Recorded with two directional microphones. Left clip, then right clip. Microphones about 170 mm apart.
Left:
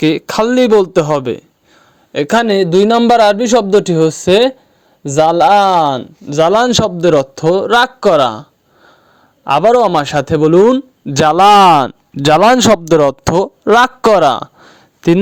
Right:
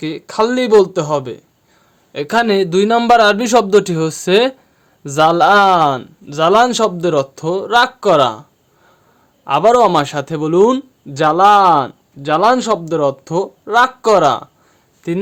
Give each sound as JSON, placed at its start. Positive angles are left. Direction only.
{"t": 0.0, "sound": "speech", "side_deg": 45}
{"t": 2.1, "sound": "a man's voice", "side_deg": 30}
{"t": 11.1, "sound": "speech", "side_deg": 55}